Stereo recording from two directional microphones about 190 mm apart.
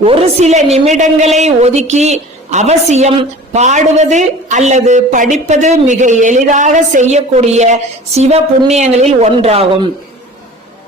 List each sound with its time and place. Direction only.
0.0 s a man's voice: 30° right (ahead or behind)